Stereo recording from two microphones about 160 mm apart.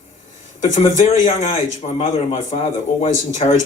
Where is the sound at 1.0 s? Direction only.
50° left (ahead or behind).